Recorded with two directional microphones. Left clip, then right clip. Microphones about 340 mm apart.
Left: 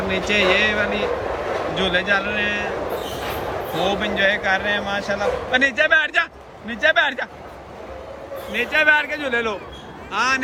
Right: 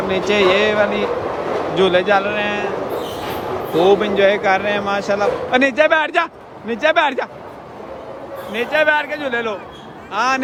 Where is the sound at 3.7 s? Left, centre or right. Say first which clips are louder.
Right 8 dB; centre.